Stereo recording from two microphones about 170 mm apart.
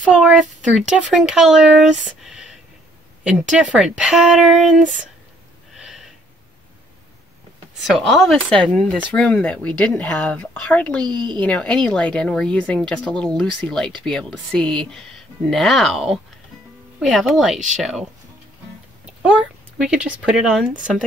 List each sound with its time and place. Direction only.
0.1 s speech: 5° right (ahead or behind)
5.8 s a sound: 5° right (ahead or behind)
7.8 s speech: centre (ahead or behind)
11.1 s speech: 25° right (ahead or behind)
11.3 s speech: 5° left (ahead or behind)
19.8 s speech: 5° right (ahead or behind)